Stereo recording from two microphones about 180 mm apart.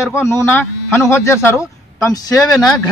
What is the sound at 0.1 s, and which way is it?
Speech, 15° left (ahead or behind).